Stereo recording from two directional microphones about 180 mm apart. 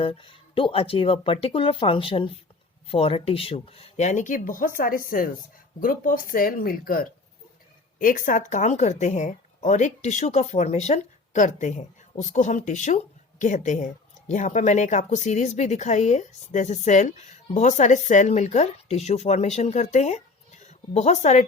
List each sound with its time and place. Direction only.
0.0 s speech: 30° left (ahead or behind)